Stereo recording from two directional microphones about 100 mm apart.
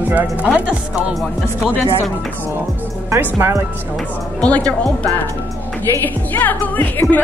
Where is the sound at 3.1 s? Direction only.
25° right (ahead or behind).